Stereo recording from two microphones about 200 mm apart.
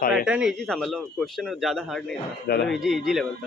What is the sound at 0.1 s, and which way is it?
Speech, 5° right (ahead or behind).